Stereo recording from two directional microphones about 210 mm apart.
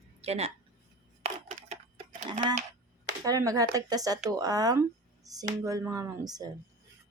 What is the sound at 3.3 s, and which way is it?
Speech, 15° right (ahead or behind).